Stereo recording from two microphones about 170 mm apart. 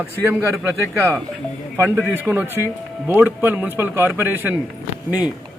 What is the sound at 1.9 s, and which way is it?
A man's voice, 10° right (ahead or behind).